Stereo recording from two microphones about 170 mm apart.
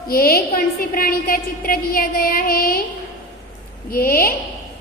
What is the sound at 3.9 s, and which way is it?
Speech, 60° left (ahead or behind).